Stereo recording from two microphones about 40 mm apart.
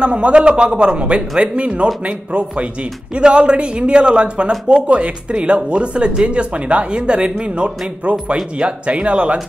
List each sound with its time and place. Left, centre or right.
0.0 s speech: right